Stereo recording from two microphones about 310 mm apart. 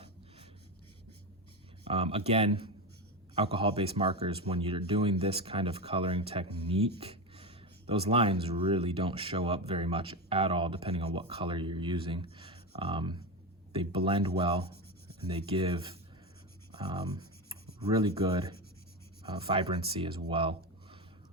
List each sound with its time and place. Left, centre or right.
1.8 s speech: centre
16.7 s rub: centre
19.2 s speech: centre